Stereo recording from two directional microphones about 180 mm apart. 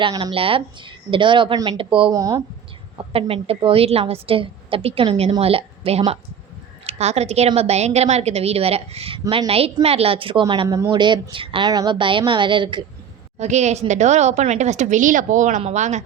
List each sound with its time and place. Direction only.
0.0 s a woman's voice: 25° right (ahead or behind)
2.1 s a woman's voice: 20° right (ahead or behind)
3.1 s a woman's voice: 30° right (ahead or behind)
13.4 s a woman's voice: 40° right (ahead or behind)